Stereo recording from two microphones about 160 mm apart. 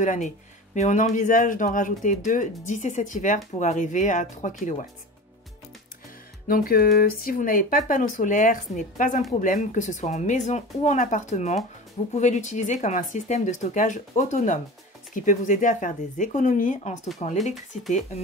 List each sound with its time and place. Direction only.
0.0 s speech: 50° left (ahead or behind)
6.4 s speech: 65° left (ahead or behind); by 17.9 s 45° left (ahead or behind)